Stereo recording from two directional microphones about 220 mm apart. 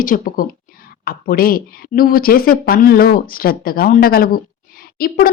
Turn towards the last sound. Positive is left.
turn(degrees=40)  # may be behind; listen again after turning